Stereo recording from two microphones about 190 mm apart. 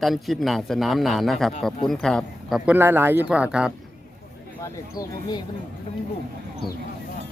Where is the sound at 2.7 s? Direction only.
10° right (ahead or behind).